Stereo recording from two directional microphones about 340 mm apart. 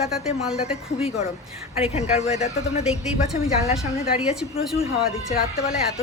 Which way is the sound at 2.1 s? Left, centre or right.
Centre.